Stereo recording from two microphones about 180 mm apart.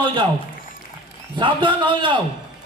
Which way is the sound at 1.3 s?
25° right (ahead or behind).